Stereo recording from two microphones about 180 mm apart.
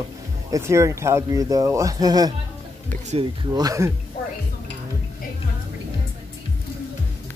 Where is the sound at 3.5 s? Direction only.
20° right (ahead or behind).